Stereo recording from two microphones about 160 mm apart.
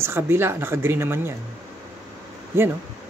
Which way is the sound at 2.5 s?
15° right (ahead or behind).